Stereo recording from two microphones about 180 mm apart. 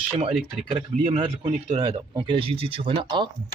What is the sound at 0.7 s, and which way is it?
Speech, 30° right (ahead or behind).